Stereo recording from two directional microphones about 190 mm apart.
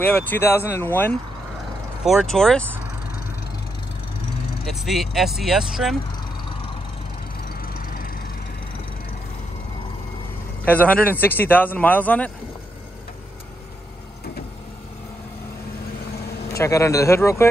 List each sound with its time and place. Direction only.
0.0 s speech: 10° left (ahead or behind)
4.8 s speech: centre (ahead or behind)
7.6 s vehicle: 50° left (ahead or behind)
10.6 s speech: 10° left (ahead or behind)
16.4 s speech: 15° left (ahead or behind)